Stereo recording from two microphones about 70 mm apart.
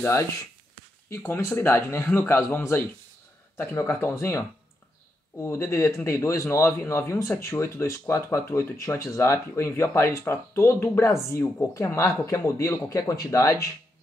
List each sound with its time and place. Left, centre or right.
0.0 s speech: left
11.7 s speech: left